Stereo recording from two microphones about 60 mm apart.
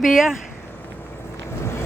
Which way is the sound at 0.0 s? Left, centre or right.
Centre.